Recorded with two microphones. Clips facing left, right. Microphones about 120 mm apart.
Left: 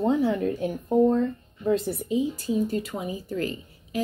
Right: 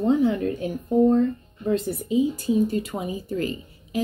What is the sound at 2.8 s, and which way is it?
Speech, 20° right (ahead or behind).